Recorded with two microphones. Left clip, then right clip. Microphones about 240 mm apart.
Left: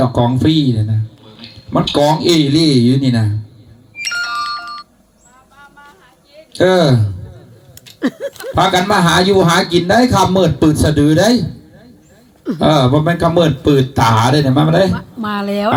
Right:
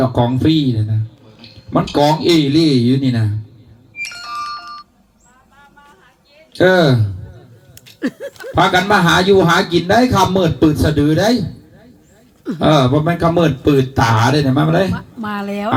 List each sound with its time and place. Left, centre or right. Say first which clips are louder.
0.0 s a man's voice: left 1 dB; left
4.3 s ringtone: left 4 dB; centre
6.5 s speech: even; left
7.9 s a sound: left 4 dB; centre
8.5 s a man's voice: even; left
12.5 s a man's voice: left 1 dB; left
15.2 s a woman's voice: left 5 dB; centre